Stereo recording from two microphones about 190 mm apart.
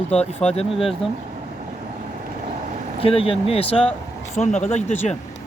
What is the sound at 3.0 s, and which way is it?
Speech, 30° left (ahead or behind).